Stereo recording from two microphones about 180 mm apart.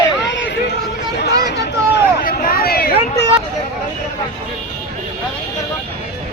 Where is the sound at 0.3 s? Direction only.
75° left (ahead or behind).